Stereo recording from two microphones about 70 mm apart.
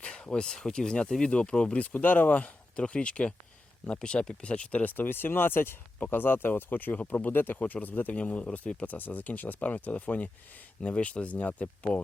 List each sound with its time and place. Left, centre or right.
0.0 s speech: centre